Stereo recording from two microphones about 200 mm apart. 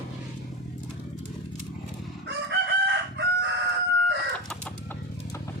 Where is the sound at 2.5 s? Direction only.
60° right (ahead or behind).